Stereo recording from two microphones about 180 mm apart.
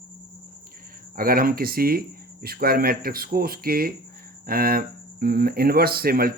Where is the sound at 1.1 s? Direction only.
55° right (ahead or behind).